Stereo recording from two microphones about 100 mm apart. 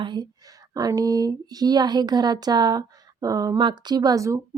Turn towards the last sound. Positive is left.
turn(degrees=-35)  # may be behind; listen again after turning